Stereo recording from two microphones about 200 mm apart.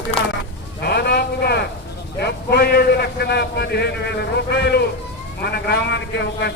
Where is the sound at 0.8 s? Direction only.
55° left (ahead or behind).